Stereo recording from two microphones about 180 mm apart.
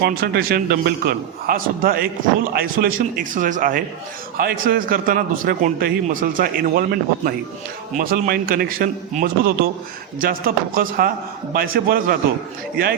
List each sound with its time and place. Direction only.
0.0 s a man's voice: 55° right (ahead or behind)
7.9 s a man's voice: 55° right (ahead or behind)